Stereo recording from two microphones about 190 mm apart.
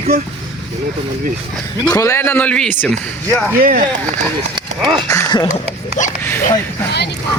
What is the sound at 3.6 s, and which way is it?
Speech, 45° right (ahead or behind).